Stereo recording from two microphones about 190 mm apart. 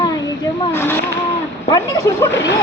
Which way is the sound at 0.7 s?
10° left (ahead or behind).